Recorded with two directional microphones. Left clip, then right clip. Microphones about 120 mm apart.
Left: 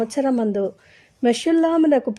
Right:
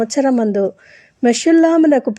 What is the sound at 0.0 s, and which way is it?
A woman's voice, 25° right (ahead or behind).